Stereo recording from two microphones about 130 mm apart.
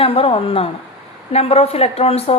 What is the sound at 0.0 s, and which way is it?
A woman's voice, 45° left (ahead or behind).